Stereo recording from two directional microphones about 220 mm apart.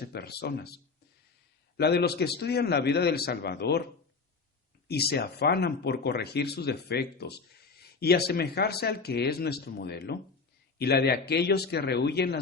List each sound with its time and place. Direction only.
0.0 s speech: 45° left (ahead or behind)
4.9 s speech: 45° left (ahead or behind)